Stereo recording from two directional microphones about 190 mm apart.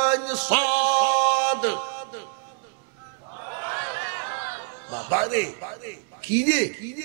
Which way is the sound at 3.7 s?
20° right (ahead or behind).